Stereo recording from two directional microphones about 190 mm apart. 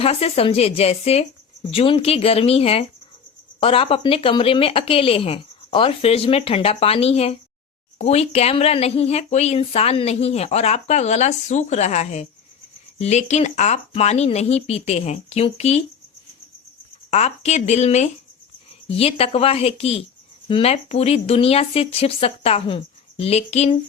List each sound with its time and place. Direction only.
0.0 s a woman's voice: 30° left (ahead or behind)
17.1 s speech: 35° left (ahead or behind)